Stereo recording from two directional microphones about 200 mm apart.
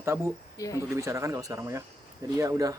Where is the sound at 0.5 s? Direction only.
15° left (ahead or behind).